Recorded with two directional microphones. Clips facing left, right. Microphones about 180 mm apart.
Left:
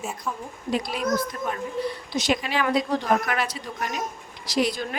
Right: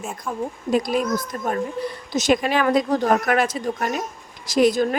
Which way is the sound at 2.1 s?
45° right (ahead or behind).